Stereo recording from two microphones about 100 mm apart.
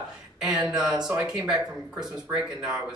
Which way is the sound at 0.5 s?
45° right (ahead or behind).